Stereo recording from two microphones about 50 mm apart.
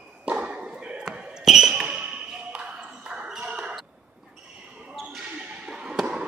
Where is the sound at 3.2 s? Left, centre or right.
Centre.